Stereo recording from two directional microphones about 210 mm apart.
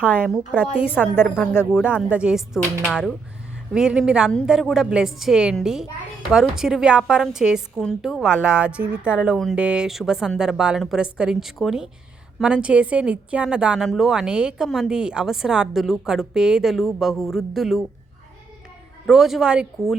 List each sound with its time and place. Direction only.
0.0 s a woman's voice: 5° right (ahead or behind)
19.0 s a woman's voice: centre (ahead or behind)